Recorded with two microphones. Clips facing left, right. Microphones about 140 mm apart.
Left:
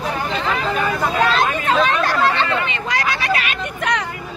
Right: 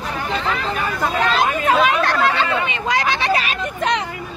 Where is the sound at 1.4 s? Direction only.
15° right (ahead or behind).